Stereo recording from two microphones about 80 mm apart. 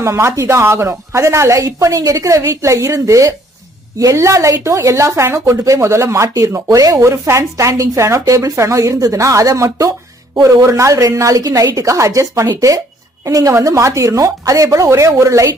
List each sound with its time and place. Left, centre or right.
0.0 s speech: right